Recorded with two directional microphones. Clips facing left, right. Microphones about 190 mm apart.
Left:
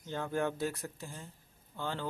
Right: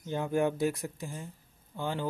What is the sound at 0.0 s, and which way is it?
Speech, 15° right (ahead or behind).